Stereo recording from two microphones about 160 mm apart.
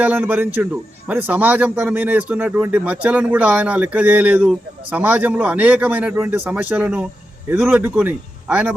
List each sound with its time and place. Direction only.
0.0 s a man's voice: 10° right (ahead or behind)